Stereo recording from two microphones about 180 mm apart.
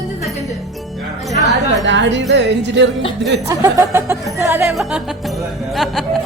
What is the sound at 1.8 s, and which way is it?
Speech, 90° right.